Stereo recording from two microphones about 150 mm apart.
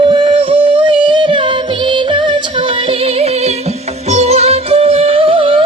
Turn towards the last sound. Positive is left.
turn(degrees=-35)  # may be behind; listen again after turning